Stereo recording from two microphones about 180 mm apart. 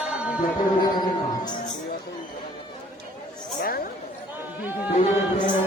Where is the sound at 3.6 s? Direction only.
55° left (ahead or behind).